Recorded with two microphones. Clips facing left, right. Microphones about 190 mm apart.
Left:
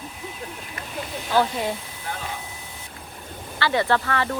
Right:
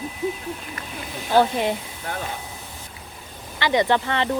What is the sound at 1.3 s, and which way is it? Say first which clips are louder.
Speech: right 4 dB; 30° right (ahead or behind).